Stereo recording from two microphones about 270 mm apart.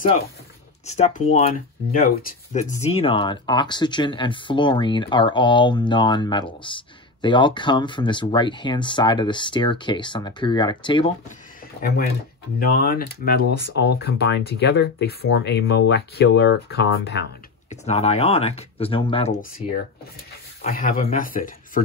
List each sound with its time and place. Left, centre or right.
0.8 s speech: left
12.5 s speech: left
17.6 s speech: left